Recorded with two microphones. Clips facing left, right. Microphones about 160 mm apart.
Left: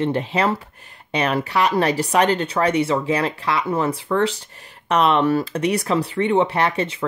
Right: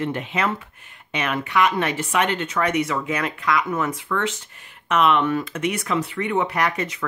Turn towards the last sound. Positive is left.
turn(degrees=30)  # may be behind; listen again after turning